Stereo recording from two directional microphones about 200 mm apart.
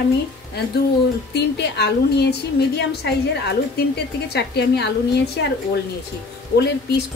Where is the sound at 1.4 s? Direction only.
55° left (ahead or behind).